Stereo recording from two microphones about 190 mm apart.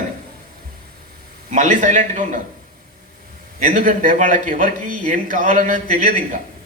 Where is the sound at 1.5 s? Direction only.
40° right (ahead or behind).